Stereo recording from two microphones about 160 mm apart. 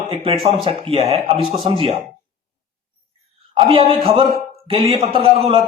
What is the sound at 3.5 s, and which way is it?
A man's voice, 40° right (ahead or behind).